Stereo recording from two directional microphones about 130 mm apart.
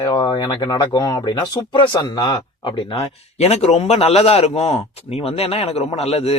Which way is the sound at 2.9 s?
55° left (ahead or behind).